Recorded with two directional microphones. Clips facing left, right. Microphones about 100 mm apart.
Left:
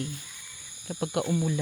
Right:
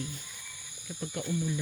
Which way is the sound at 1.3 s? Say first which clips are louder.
Left 1 dB; 90° left.